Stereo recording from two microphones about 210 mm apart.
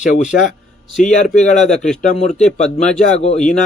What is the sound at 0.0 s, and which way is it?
Speech, 35° left (ahead or behind).